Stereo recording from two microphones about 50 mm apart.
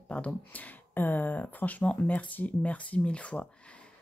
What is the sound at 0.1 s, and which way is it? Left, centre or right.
Speech, left.